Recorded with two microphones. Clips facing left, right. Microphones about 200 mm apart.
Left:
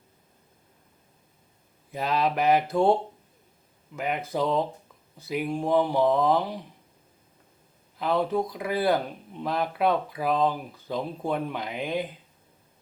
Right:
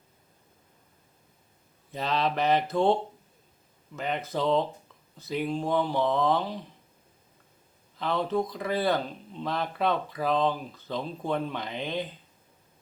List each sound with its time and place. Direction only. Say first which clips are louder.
1.9 s speech: left 2 dB; 10° left (ahead or behind)
3.9 s speech: left 2 dB; 10° left (ahead or behind)
7.9 s speech: left 2 dB; 5° left (ahead or behind)